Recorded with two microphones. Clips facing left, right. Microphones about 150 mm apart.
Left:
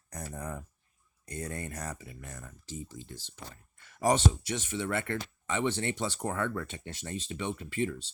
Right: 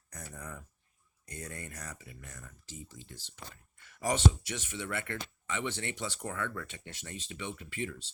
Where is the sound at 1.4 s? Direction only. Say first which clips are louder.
Left 6 dB; 50° left (ahead or behind).